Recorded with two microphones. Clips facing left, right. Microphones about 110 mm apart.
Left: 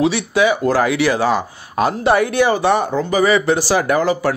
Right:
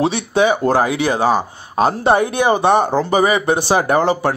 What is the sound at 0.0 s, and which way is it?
Speech, 25° right (ahead or behind).